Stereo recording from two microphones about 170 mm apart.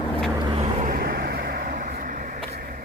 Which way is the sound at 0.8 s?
60° right (ahead or behind).